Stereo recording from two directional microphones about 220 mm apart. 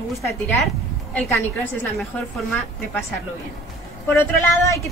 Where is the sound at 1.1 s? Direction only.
10° left (ahead or behind).